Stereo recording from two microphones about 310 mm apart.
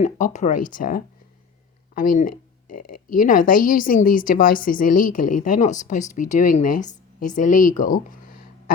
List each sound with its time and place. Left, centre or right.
0.0 s a woman's voice: left